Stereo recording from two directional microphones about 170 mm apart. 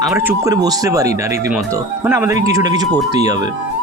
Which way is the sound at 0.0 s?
15° right (ahead or behind).